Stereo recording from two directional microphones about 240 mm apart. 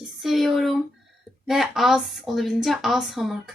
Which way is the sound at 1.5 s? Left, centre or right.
Centre.